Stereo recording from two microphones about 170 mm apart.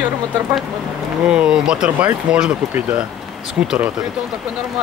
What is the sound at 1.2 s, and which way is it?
Speech, 5° right (ahead or behind).